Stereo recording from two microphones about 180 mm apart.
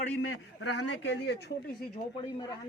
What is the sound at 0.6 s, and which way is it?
Speech, 75° left (ahead or behind).